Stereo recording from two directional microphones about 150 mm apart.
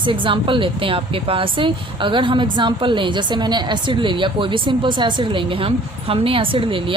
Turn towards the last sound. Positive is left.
turn(degrees=-35)  # may be behind; listen again after turning